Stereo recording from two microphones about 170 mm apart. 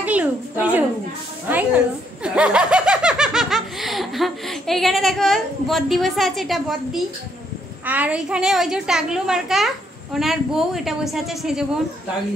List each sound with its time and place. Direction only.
0.0 s a woman's voice: 10° right (ahead or behind)